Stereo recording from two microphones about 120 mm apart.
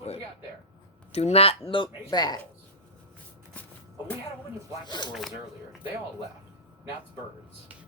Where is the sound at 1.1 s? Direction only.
60° left (ahead or behind).